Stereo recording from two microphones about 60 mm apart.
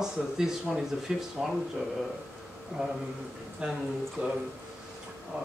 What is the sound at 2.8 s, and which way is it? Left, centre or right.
Speech, centre.